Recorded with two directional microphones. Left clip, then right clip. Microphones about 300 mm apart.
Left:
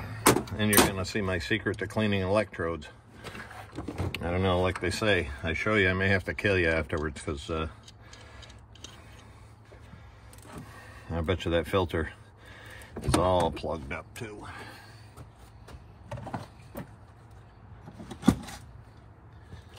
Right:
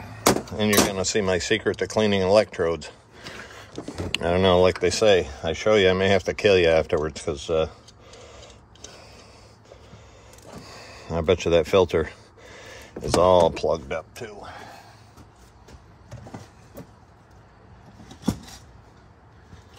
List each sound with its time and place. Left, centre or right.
0.5 s speech: right
4.1 s speech: right
10.8 s a sound: right
13.2 s speech: right